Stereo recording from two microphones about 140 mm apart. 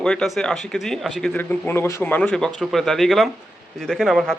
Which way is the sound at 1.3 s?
15° left (ahead or behind).